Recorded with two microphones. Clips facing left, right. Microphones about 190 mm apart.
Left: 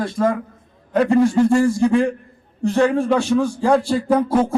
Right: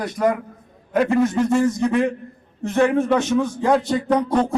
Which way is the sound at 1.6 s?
20° right (ahead or behind).